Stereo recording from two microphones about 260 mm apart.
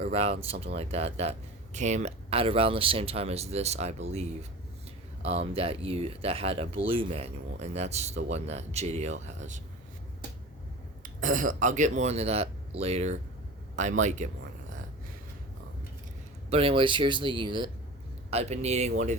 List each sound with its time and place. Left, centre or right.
0.0 s speech: right
11.0 s speech: right
16.5 s speech: right